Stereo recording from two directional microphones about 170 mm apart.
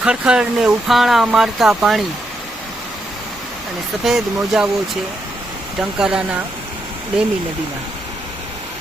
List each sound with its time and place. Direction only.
0.0 s speech: 5° right (ahead or behind)
4.0 s speech: 5° right (ahead or behind)
6.0 s speech: 5° right (ahead or behind)